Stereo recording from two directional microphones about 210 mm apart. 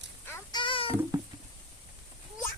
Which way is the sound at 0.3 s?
10° left (ahead or behind).